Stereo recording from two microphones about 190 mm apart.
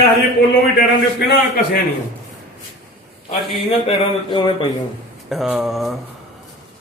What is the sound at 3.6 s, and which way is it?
Speech, 25° left (ahead or behind).